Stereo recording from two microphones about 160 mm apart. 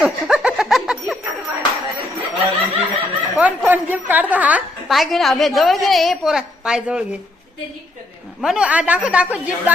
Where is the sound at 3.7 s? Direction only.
10° right (ahead or behind).